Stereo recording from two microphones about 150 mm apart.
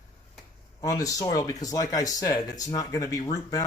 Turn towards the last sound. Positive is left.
turn(degrees=25)  # may be behind; listen again after turning